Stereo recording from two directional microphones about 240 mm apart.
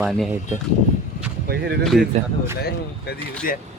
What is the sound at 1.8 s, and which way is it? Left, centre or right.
Speech, centre.